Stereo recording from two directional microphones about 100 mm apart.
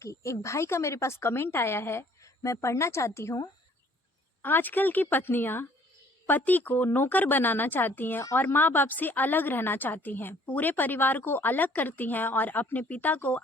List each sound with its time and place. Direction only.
0.0 s a woman's voice: 30° left (ahead or behind)
4.4 s a woman's voice: 20° left (ahead or behind)